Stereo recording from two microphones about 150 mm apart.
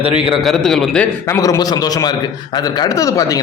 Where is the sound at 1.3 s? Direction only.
20° left (ahead or behind).